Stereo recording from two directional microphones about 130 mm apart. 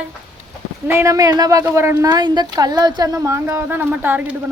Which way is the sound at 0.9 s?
20° right (ahead or behind).